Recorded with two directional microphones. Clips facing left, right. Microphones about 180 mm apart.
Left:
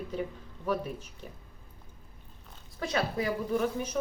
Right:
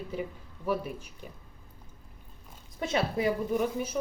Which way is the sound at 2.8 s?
25° right (ahead or behind).